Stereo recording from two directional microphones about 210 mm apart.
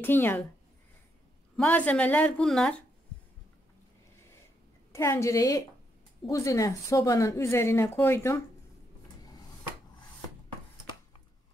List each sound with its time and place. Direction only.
0.0 s speech: 10° left (ahead or behind)
1.6 s speech: 5° left (ahead or behind)
4.9 s speech: 15° left (ahead or behind)